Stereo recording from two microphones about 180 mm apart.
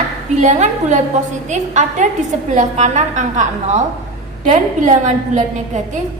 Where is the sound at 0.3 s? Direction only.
40° right (ahead or behind).